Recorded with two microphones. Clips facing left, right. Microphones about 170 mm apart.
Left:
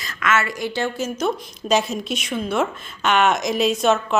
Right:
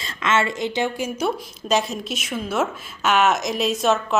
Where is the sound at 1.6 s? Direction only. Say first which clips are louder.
Left 2 dB; centre (ahead or behind).